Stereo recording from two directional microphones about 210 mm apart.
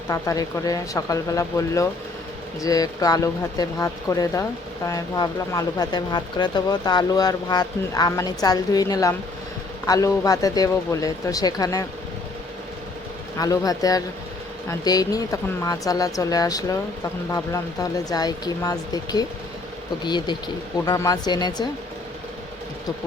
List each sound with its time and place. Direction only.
0.1 s speech: 15° left (ahead or behind)
13.4 s speech: 15° left (ahead or behind)